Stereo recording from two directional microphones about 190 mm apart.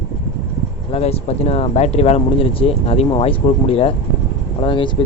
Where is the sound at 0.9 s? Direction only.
35° left (ahead or behind).